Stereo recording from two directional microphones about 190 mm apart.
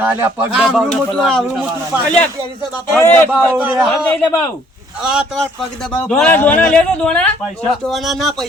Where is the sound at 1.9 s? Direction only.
10° right (ahead or behind).